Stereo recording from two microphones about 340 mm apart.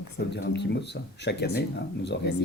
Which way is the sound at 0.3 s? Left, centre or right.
Left.